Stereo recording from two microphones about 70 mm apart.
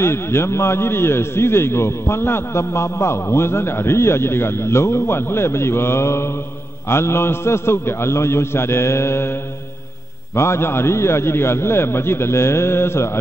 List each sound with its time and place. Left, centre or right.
0.0 s a man's voice: left